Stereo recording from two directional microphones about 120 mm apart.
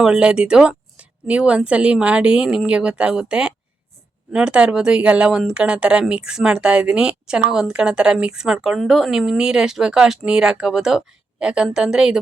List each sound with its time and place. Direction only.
0.0 s speech: 5° right (ahead or behind)